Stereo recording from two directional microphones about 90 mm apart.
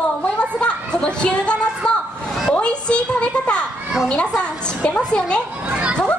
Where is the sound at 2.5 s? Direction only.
10° left (ahead or behind).